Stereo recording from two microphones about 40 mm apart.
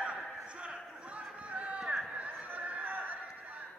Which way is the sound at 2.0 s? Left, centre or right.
Right.